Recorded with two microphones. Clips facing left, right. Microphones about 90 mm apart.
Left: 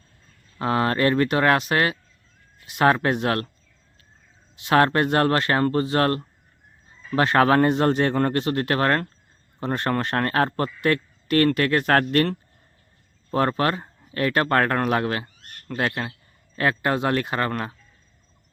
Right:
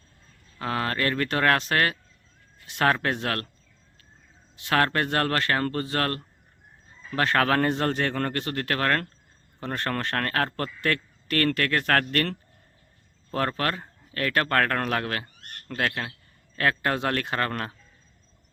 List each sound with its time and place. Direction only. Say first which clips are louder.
0.6 s speech: left 6 dB; 25° left (ahead or behind)
4.5 s speech: left 5 dB; 20° left (ahead or behind)